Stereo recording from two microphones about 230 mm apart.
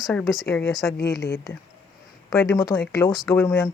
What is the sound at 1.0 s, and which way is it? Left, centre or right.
Speech, left.